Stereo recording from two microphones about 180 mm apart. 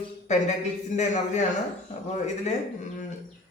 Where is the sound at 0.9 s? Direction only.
40° left (ahead or behind).